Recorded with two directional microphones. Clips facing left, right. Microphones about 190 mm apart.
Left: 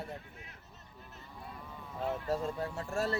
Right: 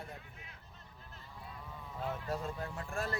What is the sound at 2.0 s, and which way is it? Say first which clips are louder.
Speech: left 5 dB; 30° left (ahead or behind).